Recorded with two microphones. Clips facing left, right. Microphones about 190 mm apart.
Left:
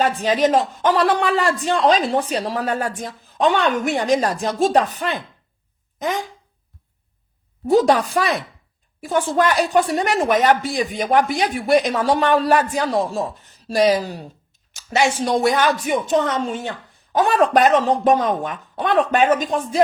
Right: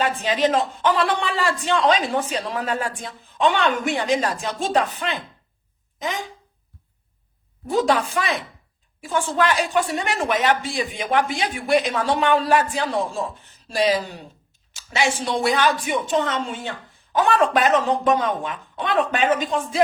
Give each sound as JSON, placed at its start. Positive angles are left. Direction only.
{"t": 0.0, "sound": "speech", "side_deg": 40}
{"t": 7.7, "sound": "a woman's voice", "side_deg": 40}